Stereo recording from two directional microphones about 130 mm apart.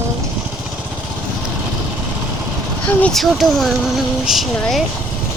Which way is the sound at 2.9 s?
10° left (ahead or behind).